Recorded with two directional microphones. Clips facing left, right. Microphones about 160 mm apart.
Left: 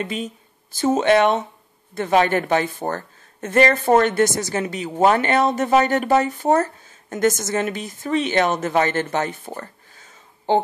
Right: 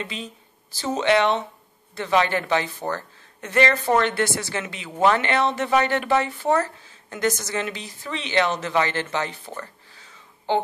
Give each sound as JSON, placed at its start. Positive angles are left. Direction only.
{"t": 0.0, "sound": "speech", "side_deg": 50}